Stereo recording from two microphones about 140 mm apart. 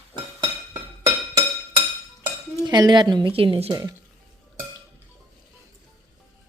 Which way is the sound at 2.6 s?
30° right (ahead or behind).